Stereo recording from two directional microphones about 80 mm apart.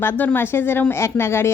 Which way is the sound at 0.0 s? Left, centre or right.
Left.